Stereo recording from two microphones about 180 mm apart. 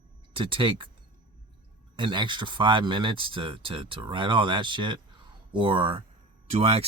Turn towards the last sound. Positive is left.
turn(degrees=-35)  # may be behind; listen again after turning